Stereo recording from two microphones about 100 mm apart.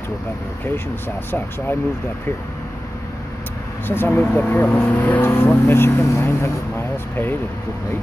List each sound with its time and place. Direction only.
3.8 s speech: 20° left (ahead or behind)